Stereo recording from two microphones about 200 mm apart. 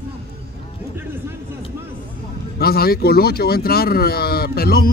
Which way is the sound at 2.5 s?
50° left (ahead or behind).